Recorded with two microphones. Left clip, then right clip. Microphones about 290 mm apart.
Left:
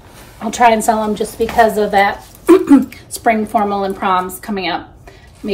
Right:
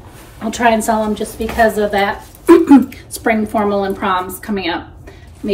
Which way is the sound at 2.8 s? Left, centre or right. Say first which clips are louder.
Left 2 dB; centre.